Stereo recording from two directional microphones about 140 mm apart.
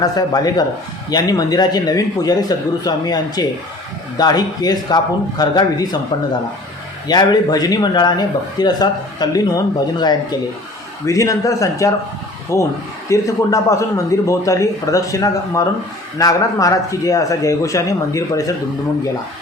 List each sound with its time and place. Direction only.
0.0 s a man's voice: 25° left (ahead or behind)
7.1 s a man's voice: 30° left (ahead or behind)